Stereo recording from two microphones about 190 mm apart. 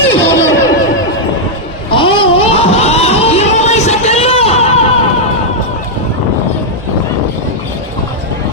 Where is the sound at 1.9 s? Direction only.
25° left (ahead or behind).